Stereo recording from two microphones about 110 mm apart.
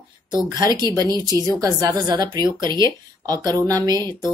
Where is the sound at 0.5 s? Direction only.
40° right (ahead or behind).